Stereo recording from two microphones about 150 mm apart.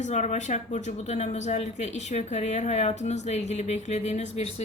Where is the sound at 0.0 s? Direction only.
50° left (ahead or behind).